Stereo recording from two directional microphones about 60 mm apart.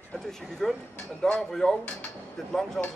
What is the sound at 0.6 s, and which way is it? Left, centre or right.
Speech, centre.